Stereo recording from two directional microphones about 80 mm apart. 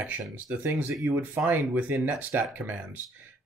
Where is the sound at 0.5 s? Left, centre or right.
Right.